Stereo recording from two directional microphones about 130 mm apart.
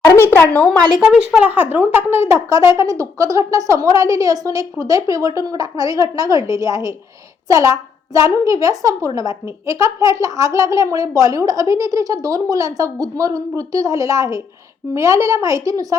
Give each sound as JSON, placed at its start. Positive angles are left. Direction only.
{"t": 0.0, "sound": "a woman's voice", "side_deg": 20}
{"t": 0.9, "sound": "a woman's voice", "side_deg": -5}